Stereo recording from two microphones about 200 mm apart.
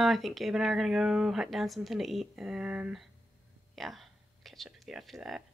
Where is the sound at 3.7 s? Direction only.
Centre (ahead or behind).